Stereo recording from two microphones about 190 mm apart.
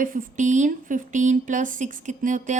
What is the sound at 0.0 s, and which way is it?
A woman's voice, 45° right (ahead or behind).